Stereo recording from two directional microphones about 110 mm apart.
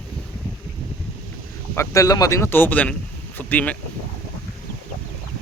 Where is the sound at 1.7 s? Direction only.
25° left (ahead or behind).